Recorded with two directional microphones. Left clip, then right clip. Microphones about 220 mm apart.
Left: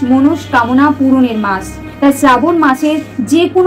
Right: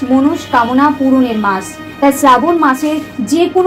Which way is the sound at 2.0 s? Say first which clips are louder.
Even; 25° left (ahead or behind).